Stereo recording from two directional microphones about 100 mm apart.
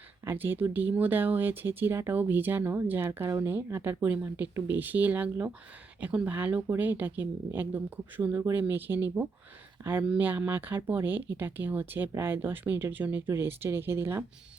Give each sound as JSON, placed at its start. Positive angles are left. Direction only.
{"t": 0.3, "sound": "speech", "side_deg": -20}